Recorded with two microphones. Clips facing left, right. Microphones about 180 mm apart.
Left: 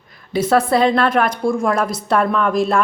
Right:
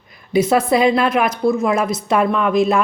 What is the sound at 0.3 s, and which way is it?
A woman's voice, 10° right (ahead or behind).